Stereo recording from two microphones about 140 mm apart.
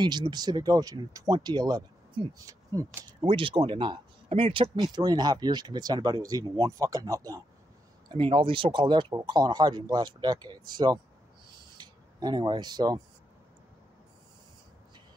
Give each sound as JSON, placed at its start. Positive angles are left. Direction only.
{"t": 0.0, "sound": "speech", "side_deg": -30}
{"t": 3.3, "sound": "a man's voice", "side_deg": -40}
{"t": 4.8, "sound": "speech", "side_deg": -30}
{"t": 8.1, "sound": "a man's voice", "side_deg": -40}
{"t": 11.7, "sound": "a sound", "side_deg": -30}